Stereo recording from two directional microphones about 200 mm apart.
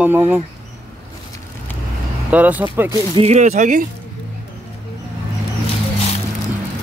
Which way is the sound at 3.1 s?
35° right (ahead or behind).